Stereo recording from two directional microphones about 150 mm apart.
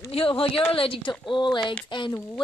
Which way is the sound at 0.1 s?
40° left (ahead or behind).